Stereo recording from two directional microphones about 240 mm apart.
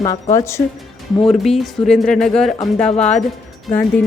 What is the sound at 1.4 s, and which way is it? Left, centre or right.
A woman's voice, centre.